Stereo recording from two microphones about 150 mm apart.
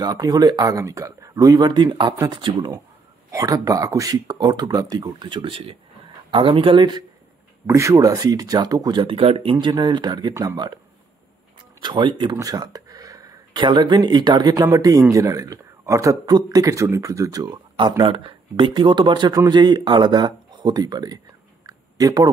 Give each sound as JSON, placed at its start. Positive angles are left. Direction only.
{"t": 0.0, "sound": "speech", "side_deg": -25}
{"t": 7.6, "sound": "speech", "side_deg": -20}
{"t": 11.8, "sound": "speech", "side_deg": -30}
{"t": 21.6, "sound": "a sound", "side_deg": -25}